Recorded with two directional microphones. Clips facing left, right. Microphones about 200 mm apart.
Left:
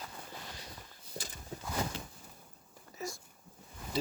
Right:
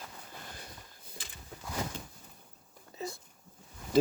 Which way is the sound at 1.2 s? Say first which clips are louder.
Left 7 dB; 45° left (ahead or behind).